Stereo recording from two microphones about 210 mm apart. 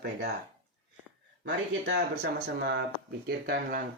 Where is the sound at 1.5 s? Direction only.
50° right (ahead or behind).